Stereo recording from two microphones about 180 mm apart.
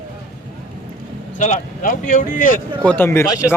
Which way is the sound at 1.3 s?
45° left (ahead or behind).